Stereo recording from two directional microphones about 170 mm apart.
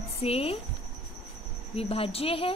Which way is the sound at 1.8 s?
35° left (ahead or behind).